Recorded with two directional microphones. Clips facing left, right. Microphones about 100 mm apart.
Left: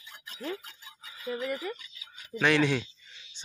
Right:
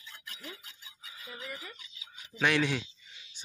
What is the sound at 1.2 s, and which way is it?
Speech, 75° left (ahead or behind).